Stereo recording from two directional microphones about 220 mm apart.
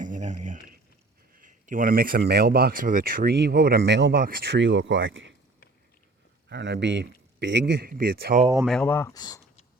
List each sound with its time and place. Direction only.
0.0 s a sound: 35° right (ahead or behind)
1.4 s speech: 35° right (ahead or behind); by 5.3 s 60° right (ahead or behind)
6.5 s speech: 50° right (ahead or behind)
8.6 s speech: centre (ahead or behind)